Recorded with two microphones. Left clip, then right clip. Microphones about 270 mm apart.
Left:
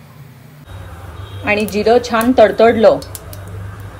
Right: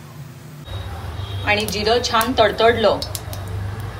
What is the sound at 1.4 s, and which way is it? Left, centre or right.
Speech, left.